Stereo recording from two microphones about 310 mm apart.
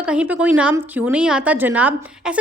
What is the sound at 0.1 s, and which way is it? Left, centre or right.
Speech, centre.